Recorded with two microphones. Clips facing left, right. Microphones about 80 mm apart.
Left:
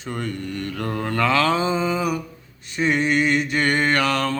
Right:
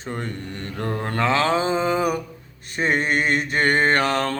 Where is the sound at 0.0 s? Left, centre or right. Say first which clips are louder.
Left 2 dB; right.